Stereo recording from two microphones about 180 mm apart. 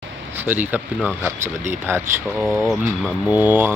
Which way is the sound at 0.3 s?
10° right (ahead or behind).